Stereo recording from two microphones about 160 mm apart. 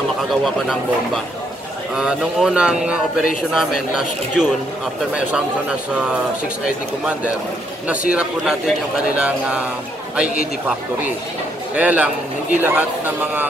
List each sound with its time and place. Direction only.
2.0 s a man's voice: 5° right (ahead or behind)
8.1 s a man's voice: 5° right (ahead or behind)
11.7 s a man's voice: 10° right (ahead or behind)